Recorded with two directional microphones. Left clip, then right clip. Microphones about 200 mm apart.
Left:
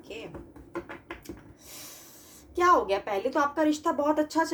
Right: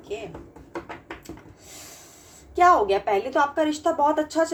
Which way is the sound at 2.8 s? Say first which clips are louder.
Right 5 dB; 45° left (ahead or behind).